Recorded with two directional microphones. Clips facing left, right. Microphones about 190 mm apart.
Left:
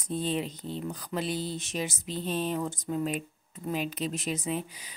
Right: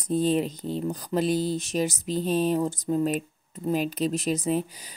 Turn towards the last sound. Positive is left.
turn(degrees=-40)  # may be behind; listen again after turning